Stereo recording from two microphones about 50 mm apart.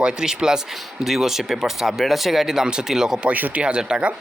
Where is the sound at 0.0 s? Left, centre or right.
Centre.